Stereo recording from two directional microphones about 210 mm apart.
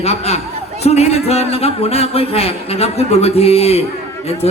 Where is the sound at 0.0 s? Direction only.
30° left (ahead or behind).